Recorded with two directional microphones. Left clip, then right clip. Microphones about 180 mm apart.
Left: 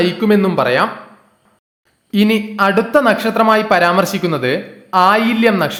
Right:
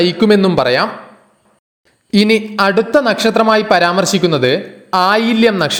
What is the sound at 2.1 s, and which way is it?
Speech, 30° right (ahead or behind).